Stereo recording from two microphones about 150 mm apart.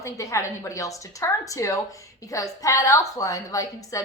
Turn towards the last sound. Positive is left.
turn(degrees=20)  # may be behind; listen again after turning